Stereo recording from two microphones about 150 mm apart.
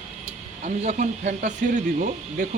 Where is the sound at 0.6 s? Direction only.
55° right (ahead or behind).